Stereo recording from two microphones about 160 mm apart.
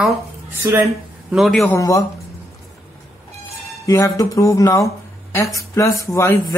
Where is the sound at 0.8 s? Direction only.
Centre (ahead or behind).